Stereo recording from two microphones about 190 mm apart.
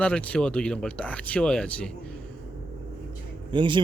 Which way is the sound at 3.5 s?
25° right (ahead or behind).